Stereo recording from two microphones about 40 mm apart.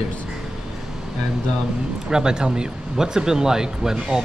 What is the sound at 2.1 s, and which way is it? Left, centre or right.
Speech, centre.